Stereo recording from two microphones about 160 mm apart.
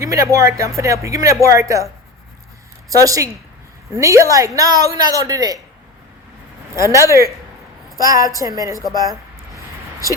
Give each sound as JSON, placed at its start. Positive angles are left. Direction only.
{"t": 0.0, "sound": "a woman's voice", "side_deg": -20}
{"t": 2.9, "sound": "a woman's voice", "side_deg": -20}
{"t": 6.7, "sound": "a woman's voice", "side_deg": -20}